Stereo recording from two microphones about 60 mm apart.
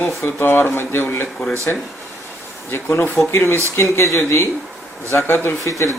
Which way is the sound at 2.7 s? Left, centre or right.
Left.